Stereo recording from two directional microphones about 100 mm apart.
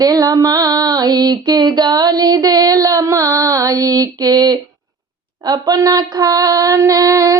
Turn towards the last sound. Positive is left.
turn(degrees=-35)  # may be behind; listen again after turning